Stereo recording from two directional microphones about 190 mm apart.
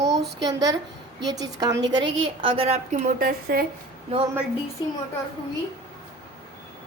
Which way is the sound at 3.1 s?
50° right (ahead or behind).